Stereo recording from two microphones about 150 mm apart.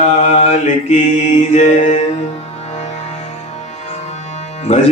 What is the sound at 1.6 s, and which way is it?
Music, 50° left (ahead or behind).